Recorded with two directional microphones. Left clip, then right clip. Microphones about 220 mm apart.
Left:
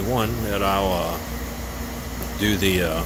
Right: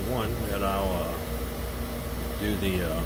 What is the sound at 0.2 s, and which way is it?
Speech, 55° left (ahead or behind).